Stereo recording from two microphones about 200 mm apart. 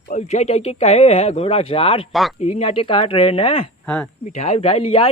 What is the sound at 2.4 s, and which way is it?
Speech, 30° left (ahead or behind).